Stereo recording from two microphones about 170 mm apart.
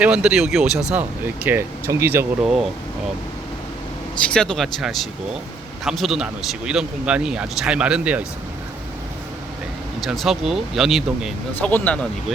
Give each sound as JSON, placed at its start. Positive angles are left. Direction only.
{"t": 0.0, "sound": "speech", "side_deg": -5}
{"t": 4.2, "sound": "speech", "side_deg": 5}
{"t": 10.1, "sound": "speech", "side_deg": 0}
{"t": 11.6, "sound": "speech", "side_deg": 10}